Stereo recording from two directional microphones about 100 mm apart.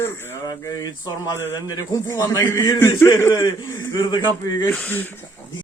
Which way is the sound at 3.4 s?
45° left (ahead or behind).